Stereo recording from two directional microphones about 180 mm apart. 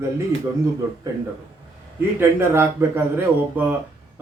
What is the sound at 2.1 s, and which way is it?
Speech, 10° right (ahead or behind).